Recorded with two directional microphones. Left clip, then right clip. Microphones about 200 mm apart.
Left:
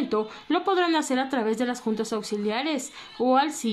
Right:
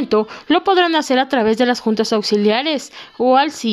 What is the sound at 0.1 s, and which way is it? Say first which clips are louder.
Speech: right 13 dB; 40° right (ahead or behind).